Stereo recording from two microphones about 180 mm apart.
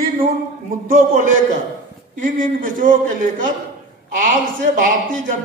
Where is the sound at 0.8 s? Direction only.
50° right (ahead or behind).